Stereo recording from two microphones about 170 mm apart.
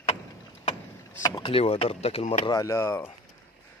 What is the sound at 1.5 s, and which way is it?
Speech, 35° left (ahead or behind).